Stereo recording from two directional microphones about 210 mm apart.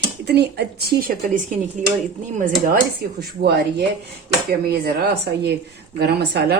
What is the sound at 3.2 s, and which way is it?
Speech, 50° right (ahead or behind).